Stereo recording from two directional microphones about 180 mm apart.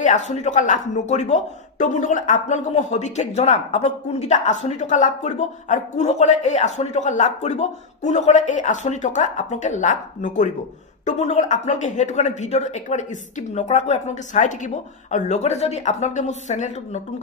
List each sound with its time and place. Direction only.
0.0 s speech: 45° left (ahead or behind)